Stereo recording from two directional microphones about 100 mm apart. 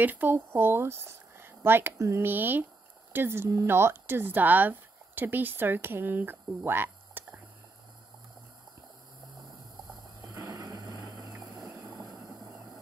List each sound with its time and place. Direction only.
0.0 s speech: 20° right (ahead or behind)
10.2 s a sound: 35° right (ahead or behind)
11.1 s vehicle: 35° right (ahead or behind)